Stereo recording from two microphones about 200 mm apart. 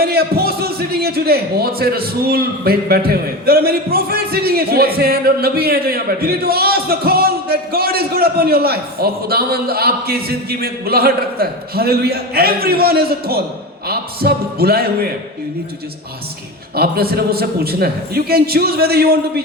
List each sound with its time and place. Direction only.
0.0 s a man's voice: 50° right (ahead or behind)
16.7 s a man's voice: 50° right (ahead or behind)